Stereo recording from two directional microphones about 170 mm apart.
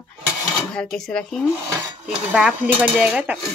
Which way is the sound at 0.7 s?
5° left (ahead or behind).